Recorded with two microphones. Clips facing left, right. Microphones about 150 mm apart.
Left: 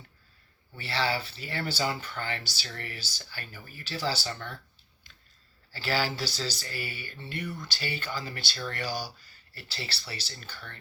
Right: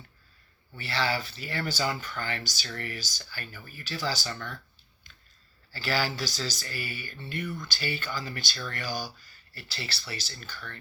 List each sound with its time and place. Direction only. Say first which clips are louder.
0.8 s speech: even; 30° left (ahead or behind)
5.7 s speech: even; 25° left (ahead or behind)